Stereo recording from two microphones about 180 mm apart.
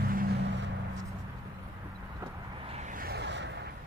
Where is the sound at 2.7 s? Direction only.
45° right (ahead or behind); by 3.5 s 75° right (ahead or behind).